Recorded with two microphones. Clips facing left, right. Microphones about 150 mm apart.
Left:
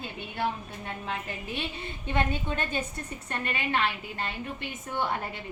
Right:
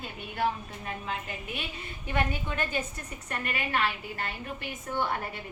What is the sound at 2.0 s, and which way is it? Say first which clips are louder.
A woman's voice: left 2 dB; 25° left (ahead or behind).